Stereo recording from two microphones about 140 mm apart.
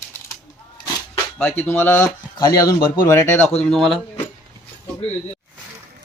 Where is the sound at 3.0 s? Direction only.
20° left (ahead or behind).